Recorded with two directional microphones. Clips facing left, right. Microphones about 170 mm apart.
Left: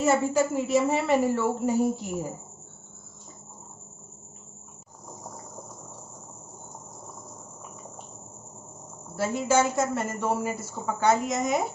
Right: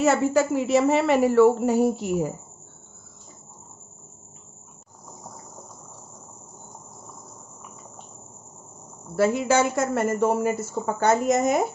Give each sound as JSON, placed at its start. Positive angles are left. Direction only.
{"t": 0.0, "sound": "a woman's voice", "side_deg": -75}
{"t": 9.1, "sound": "a woman's voice", "side_deg": -65}